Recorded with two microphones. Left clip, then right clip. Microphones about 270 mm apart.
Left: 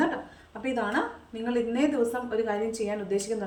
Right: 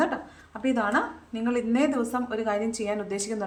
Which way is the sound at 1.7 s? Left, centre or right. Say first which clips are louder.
Right 1 dB; centre.